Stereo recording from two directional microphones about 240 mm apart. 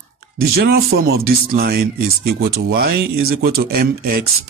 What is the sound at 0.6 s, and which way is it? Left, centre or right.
Speech, right.